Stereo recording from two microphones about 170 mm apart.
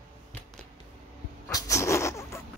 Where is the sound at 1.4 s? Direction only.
20° left (ahead or behind).